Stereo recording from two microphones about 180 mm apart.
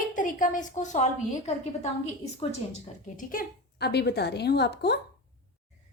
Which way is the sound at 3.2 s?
50° left (ahead or behind).